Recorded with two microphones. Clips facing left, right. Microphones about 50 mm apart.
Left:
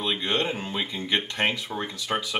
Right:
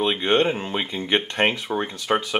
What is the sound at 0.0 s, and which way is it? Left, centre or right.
Speech, right.